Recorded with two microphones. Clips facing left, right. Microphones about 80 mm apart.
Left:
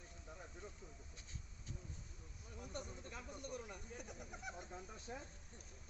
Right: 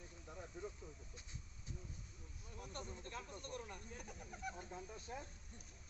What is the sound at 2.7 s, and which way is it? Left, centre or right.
Speech, centre.